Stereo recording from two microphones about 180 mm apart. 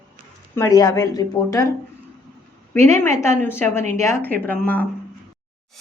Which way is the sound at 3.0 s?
15° left (ahead or behind).